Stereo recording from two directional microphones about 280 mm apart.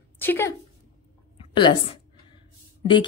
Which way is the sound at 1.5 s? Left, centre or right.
Centre.